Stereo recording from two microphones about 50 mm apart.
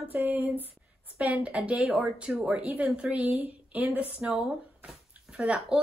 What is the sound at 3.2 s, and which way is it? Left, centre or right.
A woman's voice, right.